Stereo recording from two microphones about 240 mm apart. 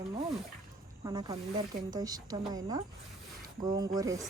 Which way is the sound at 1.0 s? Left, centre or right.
Centre.